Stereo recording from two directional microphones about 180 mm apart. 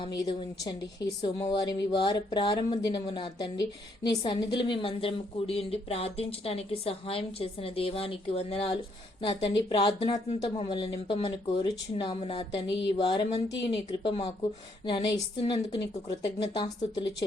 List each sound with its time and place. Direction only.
0.0 s a woman's voice: 25° left (ahead or behind)